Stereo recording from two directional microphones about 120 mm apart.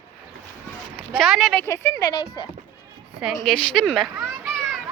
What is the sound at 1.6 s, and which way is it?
Speech, 25° left (ahead or behind).